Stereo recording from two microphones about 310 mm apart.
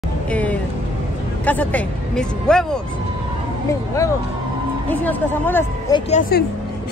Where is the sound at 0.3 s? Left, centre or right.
Centre.